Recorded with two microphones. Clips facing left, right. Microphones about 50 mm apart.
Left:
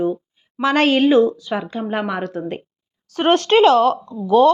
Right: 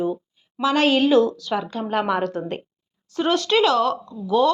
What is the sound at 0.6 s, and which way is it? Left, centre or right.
Speech, left.